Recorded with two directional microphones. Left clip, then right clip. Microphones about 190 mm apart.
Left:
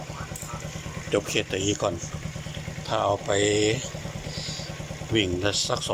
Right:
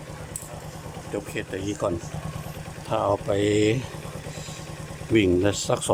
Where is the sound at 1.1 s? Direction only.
5° right (ahead or behind); by 3.8 s 25° right (ahead or behind).